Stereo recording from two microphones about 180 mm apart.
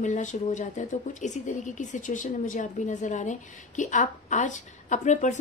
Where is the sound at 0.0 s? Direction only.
40° left (ahead or behind).